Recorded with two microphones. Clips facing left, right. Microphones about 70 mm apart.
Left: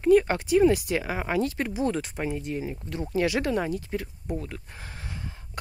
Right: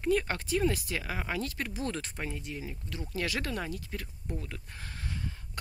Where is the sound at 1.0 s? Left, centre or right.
Left.